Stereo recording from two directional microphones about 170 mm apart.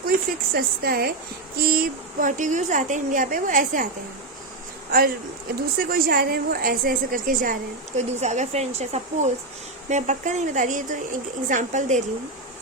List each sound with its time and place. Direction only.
0.5 s a woman's voice: 65° right (ahead or behind)
4.9 s a woman's voice: 60° right (ahead or behind)